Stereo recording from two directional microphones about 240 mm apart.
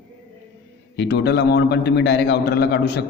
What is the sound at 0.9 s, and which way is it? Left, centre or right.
A man's voice, left.